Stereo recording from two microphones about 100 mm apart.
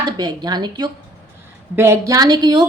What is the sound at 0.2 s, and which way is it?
Speech, 45° right (ahead or behind).